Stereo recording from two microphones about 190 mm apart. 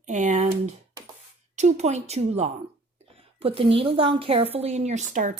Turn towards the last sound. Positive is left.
turn(degrees=-40)  # may be behind; listen again after turning